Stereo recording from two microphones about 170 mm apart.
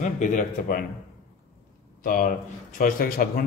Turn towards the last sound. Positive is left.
turn(degrees=60)  # may be behind; listen again after turning